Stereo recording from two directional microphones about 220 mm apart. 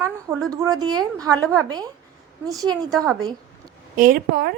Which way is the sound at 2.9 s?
Centre (ahead or behind).